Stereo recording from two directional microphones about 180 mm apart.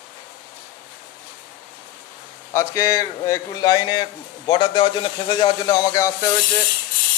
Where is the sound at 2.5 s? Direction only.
15° left (ahead or behind).